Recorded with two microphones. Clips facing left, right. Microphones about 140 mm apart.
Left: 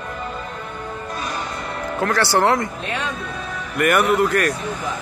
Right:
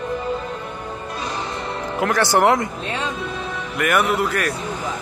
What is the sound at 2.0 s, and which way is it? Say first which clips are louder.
Speech: right 1 dB; 20° right (ahead or behind).